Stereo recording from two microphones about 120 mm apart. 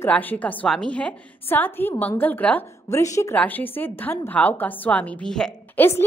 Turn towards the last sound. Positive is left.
turn(degrees=20)  # may be behind; listen again after turning